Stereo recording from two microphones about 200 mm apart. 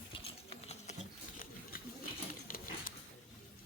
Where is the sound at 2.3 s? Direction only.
45° left (ahead or behind).